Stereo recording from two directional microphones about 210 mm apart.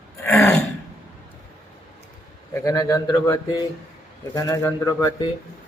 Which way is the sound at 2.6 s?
15° left (ahead or behind).